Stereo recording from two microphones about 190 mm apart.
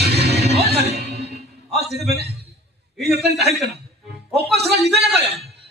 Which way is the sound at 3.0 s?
60° right (ahead or behind).